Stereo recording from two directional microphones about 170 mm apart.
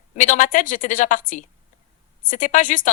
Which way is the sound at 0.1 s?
45° left (ahead or behind).